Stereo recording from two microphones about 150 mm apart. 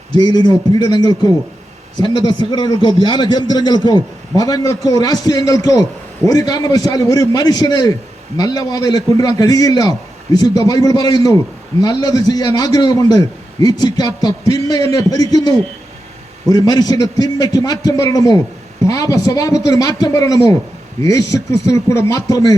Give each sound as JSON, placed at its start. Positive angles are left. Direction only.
{"t": 0.1, "sound": "a man's voice", "side_deg": 30}